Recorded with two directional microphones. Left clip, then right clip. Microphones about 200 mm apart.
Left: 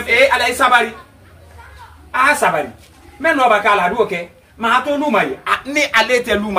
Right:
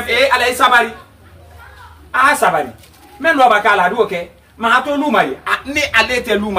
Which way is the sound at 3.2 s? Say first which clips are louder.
Right 2 dB; 15° left (ahead or behind).